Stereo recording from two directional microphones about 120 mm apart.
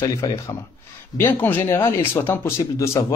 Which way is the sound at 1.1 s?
15° left (ahead or behind).